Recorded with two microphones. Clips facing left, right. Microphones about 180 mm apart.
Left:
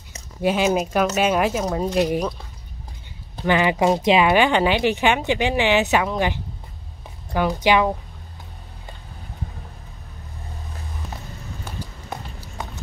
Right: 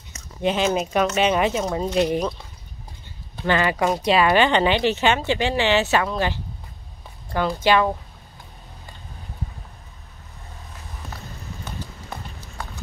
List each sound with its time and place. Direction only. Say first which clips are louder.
0.4 s speech: left 2 dB; 5° left (ahead or behind)
3.4 s speech: left 2 dB; 15° left (ahead or behind)
12.6 s a sound: left 2 dB; 20° left (ahead or behind)